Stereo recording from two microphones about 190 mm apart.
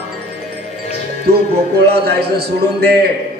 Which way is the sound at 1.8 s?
55° right (ahead or behind).